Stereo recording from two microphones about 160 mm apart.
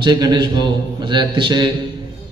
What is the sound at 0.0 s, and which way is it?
A man's voice, 25° right (ahead or behind).